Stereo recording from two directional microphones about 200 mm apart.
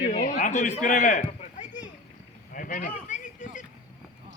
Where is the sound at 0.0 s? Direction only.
35° left (ahead or behind).